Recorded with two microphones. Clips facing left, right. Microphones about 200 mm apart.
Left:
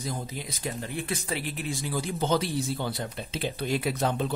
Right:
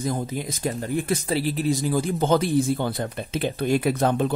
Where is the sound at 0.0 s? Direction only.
50° right (ahead or behind).